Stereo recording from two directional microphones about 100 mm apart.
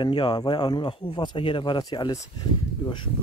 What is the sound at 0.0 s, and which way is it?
Speech, 50° left (ahead or behind).